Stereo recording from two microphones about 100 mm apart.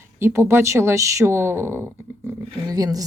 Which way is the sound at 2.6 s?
35° right (ahead or behind).